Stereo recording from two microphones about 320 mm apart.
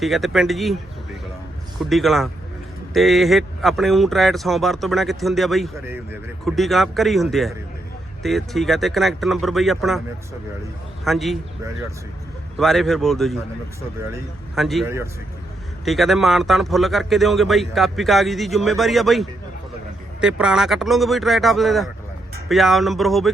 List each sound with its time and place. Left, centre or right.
0.0 s speech: centre
1.8 s speech: centre
11.0 s speech: centre